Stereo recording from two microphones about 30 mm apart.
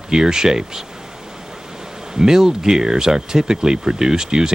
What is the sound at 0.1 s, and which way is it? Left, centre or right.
Speech, right.